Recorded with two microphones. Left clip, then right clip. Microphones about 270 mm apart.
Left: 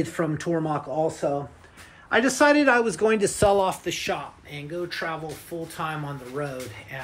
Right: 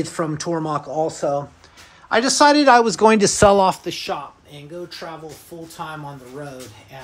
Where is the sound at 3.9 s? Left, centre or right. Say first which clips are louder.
Right 2 dB; centre.